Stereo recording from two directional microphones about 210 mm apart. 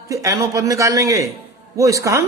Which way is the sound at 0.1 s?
15° right (ahead or behind).